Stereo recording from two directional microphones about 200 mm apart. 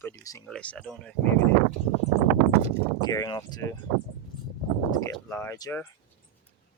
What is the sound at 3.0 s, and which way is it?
Speech, 20° left (ahead or behind).